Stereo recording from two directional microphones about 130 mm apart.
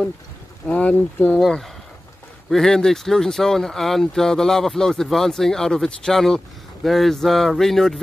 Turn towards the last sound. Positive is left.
turn(degrees=0)  # may be behind; listen again after turning